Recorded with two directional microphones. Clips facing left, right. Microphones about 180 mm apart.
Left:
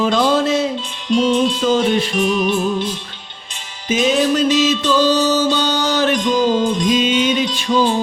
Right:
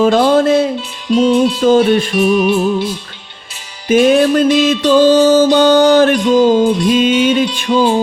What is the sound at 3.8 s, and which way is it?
Music, 55° right (ahead or behind).